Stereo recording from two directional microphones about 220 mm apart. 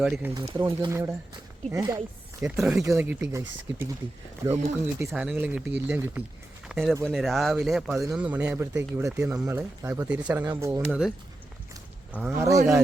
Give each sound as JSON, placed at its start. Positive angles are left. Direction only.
{"t": 0.0, "sound": "speech", "side_deg": -5}
{"t": 0.3, "sound": "speech", "side_deg": -20}
{"t": 2.4, "sound": "speech", "side_deg": 0}
{"t": 11.7, "sound": "a sound", "side_deg": -10}